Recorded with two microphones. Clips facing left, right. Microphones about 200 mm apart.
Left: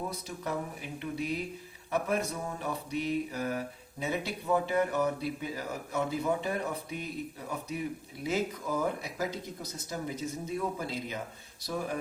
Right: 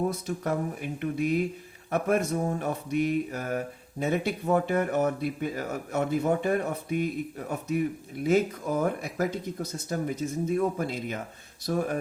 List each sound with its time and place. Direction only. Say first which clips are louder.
0.1 s speech: right 6 dB; 50° right (ahead or behind)